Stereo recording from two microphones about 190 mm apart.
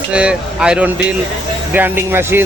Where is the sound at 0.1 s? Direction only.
5° right (ahead or behind).